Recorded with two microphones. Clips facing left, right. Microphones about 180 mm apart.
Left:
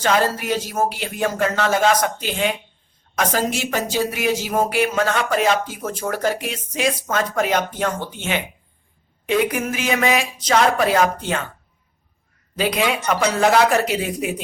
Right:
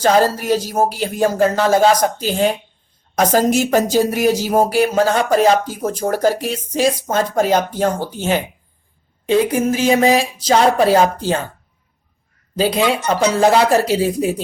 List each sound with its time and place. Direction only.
0.0 s speech: 35° right (ahead or behind)
12.5 s speech: 30° right (ahead or behind)